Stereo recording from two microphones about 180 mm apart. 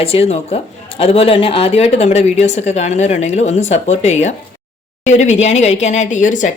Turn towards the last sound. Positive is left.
turn(degrees=45)  # may be behind; listen again after turning